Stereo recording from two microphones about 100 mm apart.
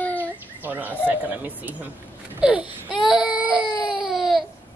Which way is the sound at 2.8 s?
50° left (ahead or behind).